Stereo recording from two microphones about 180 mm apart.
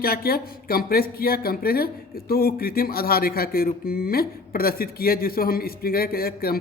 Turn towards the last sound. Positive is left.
turn(degrees=55)  # may be behind; listen again after turning